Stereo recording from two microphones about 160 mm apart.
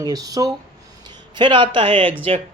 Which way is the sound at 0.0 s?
25° right (ahead or behind).